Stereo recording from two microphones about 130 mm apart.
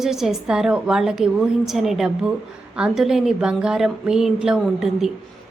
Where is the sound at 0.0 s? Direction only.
5° right (ahead or behind).